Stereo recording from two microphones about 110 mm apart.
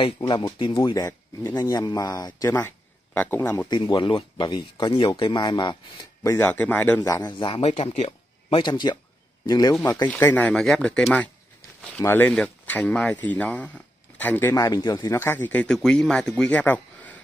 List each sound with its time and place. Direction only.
0.2 s speech: 45° left (ahead or behind); by 2.7 s 30° left (ahead or behind)
3.2 s speech: 20° left (ahead or behind)
3.7 s speech: 45° left (ahead or behind)
6.3 s speech: 20° left (ahead or behind)
7.0 s speech: 35° left (ahead or behind)
7.4 s speech: 55° left (ahead or behind)
7.7 s speech: 90° left
8.5 s speech: 45° left (ahead or behind)
10.0 s speech: 15° left (ahead or behind)
12.0 s speech: 20° left (ahead or behind)
14.5 s speech: 35° left (ahead or behind)
15.0 s speech: 20° left (ahead or behind)